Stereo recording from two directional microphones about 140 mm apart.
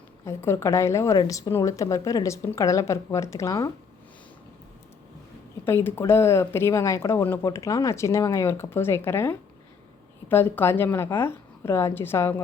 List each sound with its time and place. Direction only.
0.3 s speech: 20° left (ahead or behind)
5.6 s a woman's voice: 15° left (ahead or behind)